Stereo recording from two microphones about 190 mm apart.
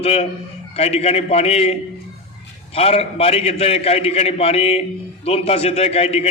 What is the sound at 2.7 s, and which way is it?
A man's voice, 30° left (ahead or behind).